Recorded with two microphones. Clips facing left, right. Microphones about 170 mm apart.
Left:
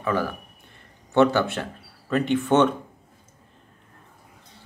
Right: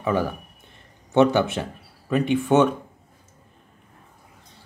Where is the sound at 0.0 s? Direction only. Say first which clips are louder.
Right 2 dB; 20° right (ahead or behind).